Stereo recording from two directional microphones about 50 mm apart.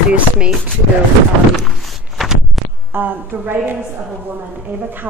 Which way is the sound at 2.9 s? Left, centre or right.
Right.